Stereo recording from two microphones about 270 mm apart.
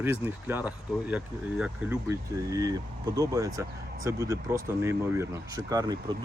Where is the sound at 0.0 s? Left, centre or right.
Centre.